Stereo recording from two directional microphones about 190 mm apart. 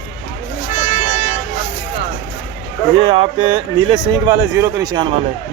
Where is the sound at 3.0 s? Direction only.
25° right (ahead or behind).